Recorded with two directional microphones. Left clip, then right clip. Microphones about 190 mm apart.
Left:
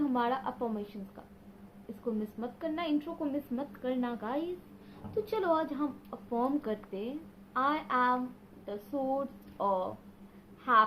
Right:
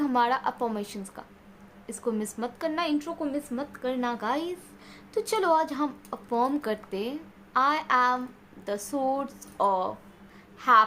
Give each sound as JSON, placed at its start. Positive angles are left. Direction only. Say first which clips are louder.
{"t": 0.0, "sound": "speech", "louder": "right 7 dB", "side_deg": -40}
{"t": 3.0, "sound": "a woman's voice", "louder": "right 4 dB", "side_deg": -20}
{"t": 5.1, "sound": "speech", "louder": "right 6 dB", "side_deg": -45}